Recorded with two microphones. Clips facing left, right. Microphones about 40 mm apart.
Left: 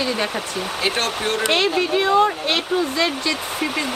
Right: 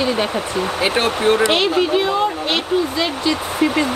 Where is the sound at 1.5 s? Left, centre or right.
Centre.